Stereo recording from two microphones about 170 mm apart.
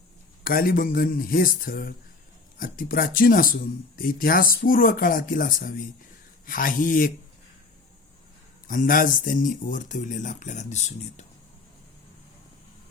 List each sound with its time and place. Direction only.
0.4 s speech: 60° left (ahead or behind)
8.6 s speech: 55° left (ahead or behind)